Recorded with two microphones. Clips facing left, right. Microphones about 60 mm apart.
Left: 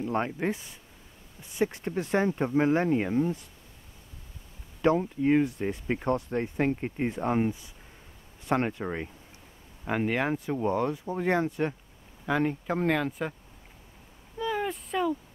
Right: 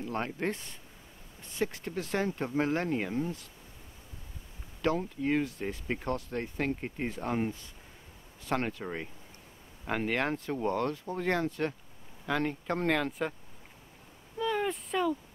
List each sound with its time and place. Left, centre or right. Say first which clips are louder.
0.0 s speech: left 5 dB; centre
0.4 s speech: left 3 dB; centre
1.6 s speech: left 5 dB; left
4.8 s speech: left 6 dB; centre
14.4 s a sound: left 1 dB; centre